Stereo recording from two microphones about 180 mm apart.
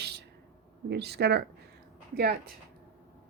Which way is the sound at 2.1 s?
55° right (ahead or behind).